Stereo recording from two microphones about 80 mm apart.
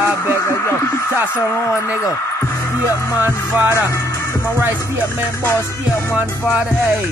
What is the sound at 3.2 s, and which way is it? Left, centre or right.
Music, right.